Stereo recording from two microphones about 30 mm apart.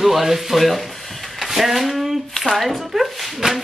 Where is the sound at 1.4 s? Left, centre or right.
Centre.